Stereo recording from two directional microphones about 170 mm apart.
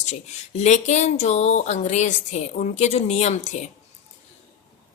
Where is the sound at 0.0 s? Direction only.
40° left (ahead or behind).